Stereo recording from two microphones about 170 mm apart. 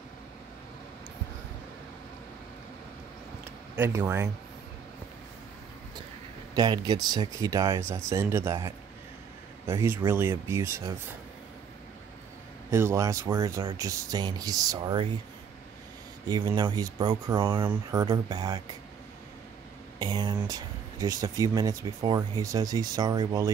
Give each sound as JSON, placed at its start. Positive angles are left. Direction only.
{"t": 3.7, "sound": "speech", "side_deg": -10}
{"t": 6.5, "sound": "speech", "side_deg": -25}
{"t": 12.7, "sound": "speech", "side_deg": -15}
{"t": 16.3, "sound": "speech", "side_deg": -25}
{"t": 20.0, "sound": "speech", "side_deg": -25}